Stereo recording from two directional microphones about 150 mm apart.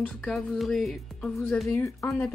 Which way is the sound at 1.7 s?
15° left (ahead or behind).